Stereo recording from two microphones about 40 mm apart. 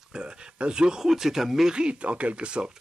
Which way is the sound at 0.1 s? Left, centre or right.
Right.